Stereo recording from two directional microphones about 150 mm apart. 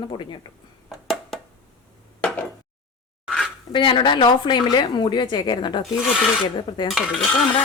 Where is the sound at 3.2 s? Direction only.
Centre (ahead or behind).